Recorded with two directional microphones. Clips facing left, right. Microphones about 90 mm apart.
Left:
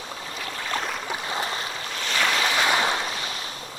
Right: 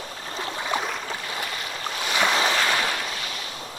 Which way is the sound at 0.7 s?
5° right (ahead or behind).